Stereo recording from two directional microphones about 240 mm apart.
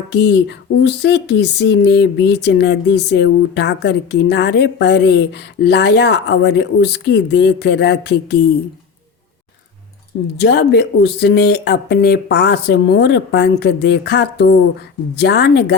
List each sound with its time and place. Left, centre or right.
0.1 s speech: left
10.3 s speech: left